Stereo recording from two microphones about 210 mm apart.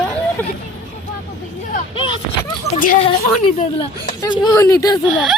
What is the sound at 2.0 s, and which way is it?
Speech, 20° left (ahead or behind).